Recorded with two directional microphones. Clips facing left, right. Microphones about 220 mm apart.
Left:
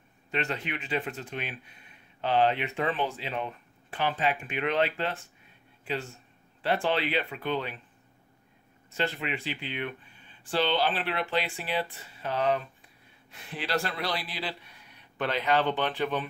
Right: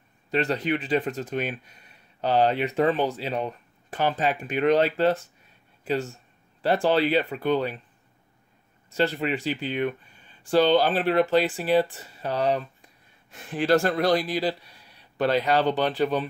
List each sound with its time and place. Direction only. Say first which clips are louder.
0.3 s speech: right 8 dB; 35° right (ahead or behind)
6.6 s speech: right 6 dB; 40° right (ahead or behind)
8.9 s speech: right 7 dB; 40° right (ahead or behind)
13.3 s speech: right 10 dB; 45° right (ahead or behind)